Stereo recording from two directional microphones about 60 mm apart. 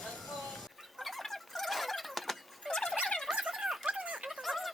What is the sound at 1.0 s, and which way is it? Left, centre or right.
Fowl, centre.